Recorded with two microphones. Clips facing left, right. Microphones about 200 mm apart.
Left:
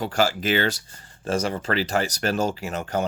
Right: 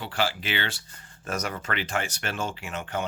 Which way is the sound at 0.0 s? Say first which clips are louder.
Left 6 dB; 40° left (ahead or behind).